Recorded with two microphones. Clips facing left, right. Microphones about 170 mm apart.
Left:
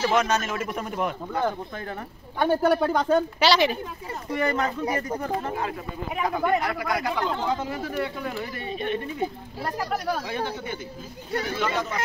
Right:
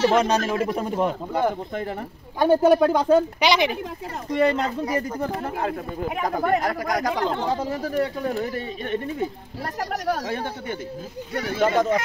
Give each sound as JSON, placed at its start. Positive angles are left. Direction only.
{"t": 0.0, "sound": "speech", "side_deg": -30}
{"t": 4.4, "sound": "speech", "side_deg": -30}
{"t": 5.3, "sound": "speech", "side_deg": -50}
{"t": 6.2, "sound": "speech", "side_deg": -40}
{"t": 10.2, "sound": "speech", "side_deg": -45}